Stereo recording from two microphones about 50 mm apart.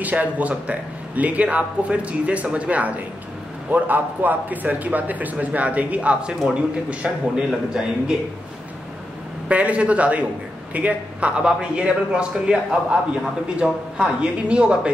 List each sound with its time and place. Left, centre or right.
0.0 s a man's voice: right
9.5 s a man's voice: right